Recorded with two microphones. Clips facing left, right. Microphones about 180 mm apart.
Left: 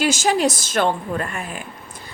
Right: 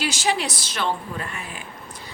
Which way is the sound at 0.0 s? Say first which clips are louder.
Left 6 dB; 45° left (ahead or behind).